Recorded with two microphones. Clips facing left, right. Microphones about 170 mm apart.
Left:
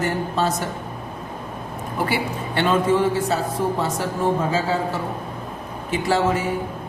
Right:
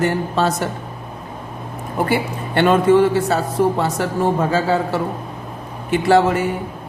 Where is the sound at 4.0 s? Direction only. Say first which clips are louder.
Right 4 dB; 65° right (ahead or behind).